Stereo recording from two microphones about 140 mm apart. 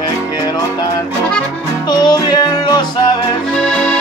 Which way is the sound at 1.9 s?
30° left (ahead or behind).